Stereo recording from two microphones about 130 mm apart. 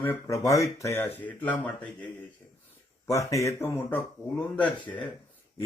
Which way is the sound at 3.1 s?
25° left (ahead or behind).